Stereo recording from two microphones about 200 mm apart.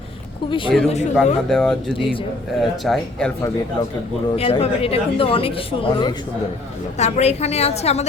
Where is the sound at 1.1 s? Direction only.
Centre (ahead or behind).